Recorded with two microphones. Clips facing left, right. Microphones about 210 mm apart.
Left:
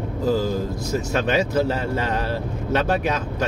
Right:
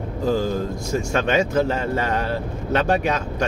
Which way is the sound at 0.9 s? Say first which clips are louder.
Right 1 dB; 5° left (ahead or behind).